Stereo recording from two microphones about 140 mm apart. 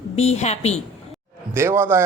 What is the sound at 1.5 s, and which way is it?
Speech, 15° right (ahead or behind).